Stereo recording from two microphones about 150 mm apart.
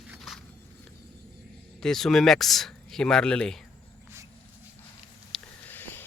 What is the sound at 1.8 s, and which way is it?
Speech, 5° left (ahead or behind).